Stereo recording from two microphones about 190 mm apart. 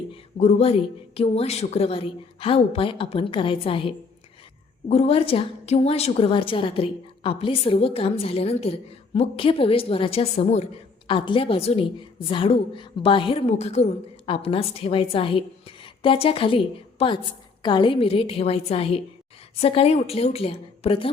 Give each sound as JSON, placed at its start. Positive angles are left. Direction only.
{"t": 0.1, "sound": "a woman's voice", "side_deg": 35}